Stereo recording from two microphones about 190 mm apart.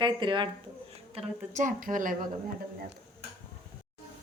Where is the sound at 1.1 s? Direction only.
40° right (ahead or behind).